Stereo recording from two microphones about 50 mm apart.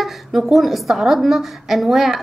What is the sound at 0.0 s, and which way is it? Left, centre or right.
A woman's voice, centre.